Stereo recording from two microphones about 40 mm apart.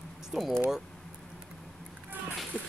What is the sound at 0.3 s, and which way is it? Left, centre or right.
Speech, right.